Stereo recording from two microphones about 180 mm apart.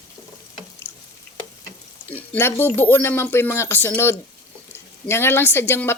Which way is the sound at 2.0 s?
10° left (ahead or behind).